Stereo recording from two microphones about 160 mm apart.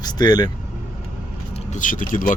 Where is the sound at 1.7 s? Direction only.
55° left (ahead or behind).